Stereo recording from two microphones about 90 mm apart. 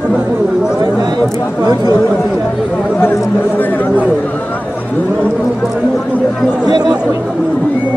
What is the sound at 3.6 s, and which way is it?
Speech, 20° left (ahead or behind).